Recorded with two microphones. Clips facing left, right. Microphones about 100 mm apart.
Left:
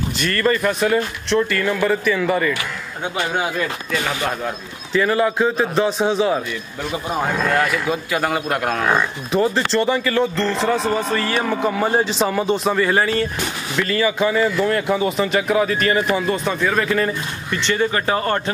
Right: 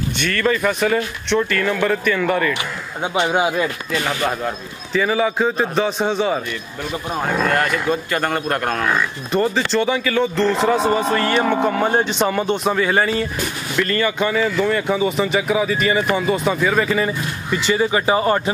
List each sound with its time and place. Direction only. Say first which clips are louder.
0.2 s speech: even; centre (ahead or behind)
3.2 s speech: right 4 dB; 20° right (ahead or behind)
4.2 s speech: right 2 dB; centre (ahead or behind)